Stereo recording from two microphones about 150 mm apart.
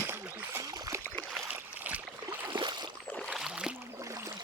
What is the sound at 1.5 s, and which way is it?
Boat, 10° right (ahead or behind).